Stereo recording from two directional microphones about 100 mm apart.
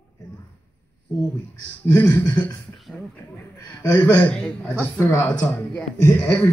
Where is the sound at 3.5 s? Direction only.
30° left (ahead or behind).